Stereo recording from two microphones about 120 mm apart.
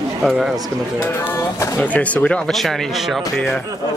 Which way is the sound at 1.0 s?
25° left (ahead or behind).